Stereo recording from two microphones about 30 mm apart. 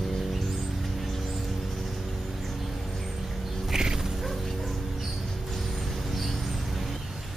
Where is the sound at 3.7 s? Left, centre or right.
Centre.